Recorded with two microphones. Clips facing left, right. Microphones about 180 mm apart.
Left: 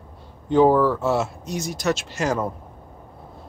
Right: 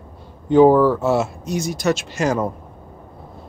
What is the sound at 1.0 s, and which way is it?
Speech, 5° right (ahead or behind).